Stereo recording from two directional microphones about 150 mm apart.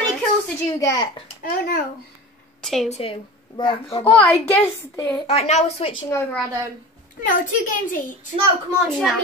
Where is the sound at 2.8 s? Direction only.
40° left (ahead or behind).